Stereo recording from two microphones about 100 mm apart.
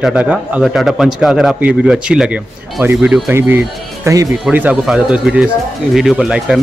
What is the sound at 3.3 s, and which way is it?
A man's voice, 25° right (ahead or behind).